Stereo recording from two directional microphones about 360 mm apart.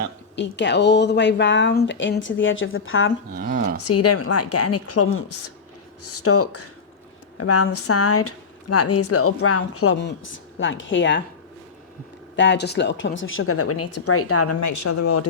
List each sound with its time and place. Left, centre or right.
0.3 s a woman's voice: left
3.2 s speech: right
3.8 s a woman's voice: left
12.4 s a woman's voice: left